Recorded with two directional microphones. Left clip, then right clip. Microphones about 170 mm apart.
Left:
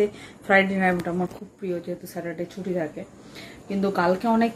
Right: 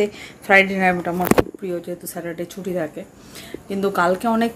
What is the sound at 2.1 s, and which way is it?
Speech, 15° right (ahead or behind).